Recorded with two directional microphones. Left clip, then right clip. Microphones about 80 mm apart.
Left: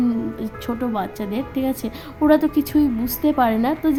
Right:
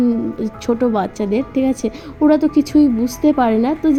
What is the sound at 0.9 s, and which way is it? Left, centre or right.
Speech, right.